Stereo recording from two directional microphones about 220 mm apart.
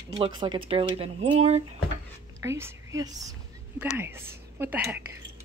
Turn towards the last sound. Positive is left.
turn(degrees=-10)  # may be behind; listen again after turning